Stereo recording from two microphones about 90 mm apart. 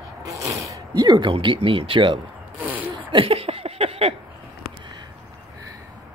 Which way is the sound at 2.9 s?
80° right.